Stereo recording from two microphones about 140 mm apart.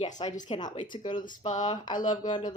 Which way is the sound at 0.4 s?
35° left (ahead or behind).